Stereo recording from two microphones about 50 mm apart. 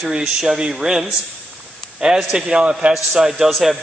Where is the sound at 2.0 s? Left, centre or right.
Centre.